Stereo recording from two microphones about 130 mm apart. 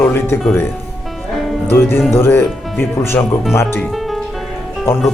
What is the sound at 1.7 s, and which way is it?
Speech, 15° left (ahead or behind).